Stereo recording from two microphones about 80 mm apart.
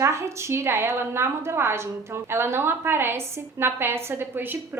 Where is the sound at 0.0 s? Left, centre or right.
Right.